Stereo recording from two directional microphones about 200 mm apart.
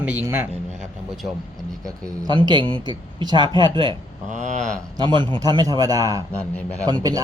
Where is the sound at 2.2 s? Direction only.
20° right (ahead or behind).